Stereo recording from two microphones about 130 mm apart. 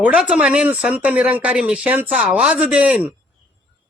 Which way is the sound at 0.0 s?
10° right (ahead or behind).